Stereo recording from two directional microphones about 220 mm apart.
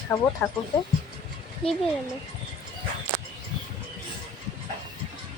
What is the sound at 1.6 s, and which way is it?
Speech, 25° left (ahead or behind).